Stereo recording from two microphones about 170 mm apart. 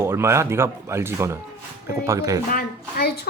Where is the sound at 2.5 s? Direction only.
65° left (ahead or behind).